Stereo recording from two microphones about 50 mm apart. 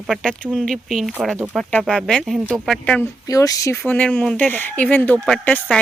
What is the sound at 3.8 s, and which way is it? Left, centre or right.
Speech, left.